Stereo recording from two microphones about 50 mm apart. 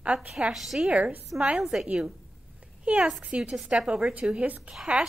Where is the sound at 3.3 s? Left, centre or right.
Centre.